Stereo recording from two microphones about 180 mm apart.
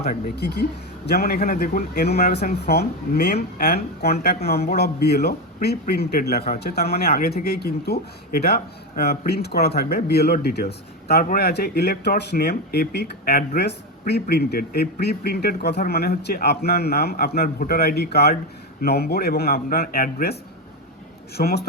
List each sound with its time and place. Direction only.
0.0 s speech: 60° left (ahead or behind)